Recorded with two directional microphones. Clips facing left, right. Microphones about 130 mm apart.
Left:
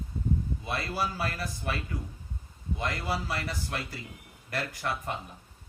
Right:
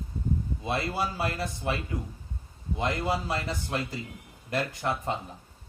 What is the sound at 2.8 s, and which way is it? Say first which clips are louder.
Speech: right 4 dB; 20° right (ahead or behind).